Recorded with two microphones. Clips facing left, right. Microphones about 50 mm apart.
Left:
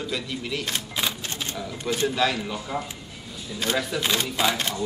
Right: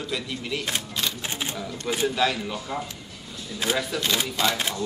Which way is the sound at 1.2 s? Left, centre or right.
Centre.